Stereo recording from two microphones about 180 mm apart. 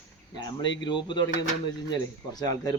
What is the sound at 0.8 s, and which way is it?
A man's voice, 25° left (ahead or behind).